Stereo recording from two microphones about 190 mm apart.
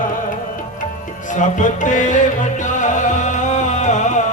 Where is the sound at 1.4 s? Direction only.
40° left (ahead or behind).